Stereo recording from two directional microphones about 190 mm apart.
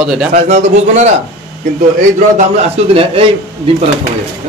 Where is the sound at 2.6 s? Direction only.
30° right (ahead or behind).